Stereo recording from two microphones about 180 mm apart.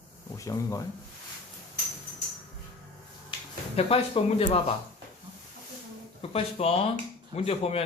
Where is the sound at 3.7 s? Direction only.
35° left (ahead or behind).